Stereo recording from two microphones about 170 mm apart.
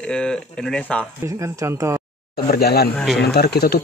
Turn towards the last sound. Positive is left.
turn(degrees=70)  # may be behind; listen again after turning